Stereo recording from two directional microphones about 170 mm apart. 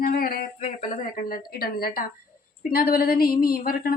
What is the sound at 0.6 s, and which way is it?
Speech, 40° left (ahead or behind).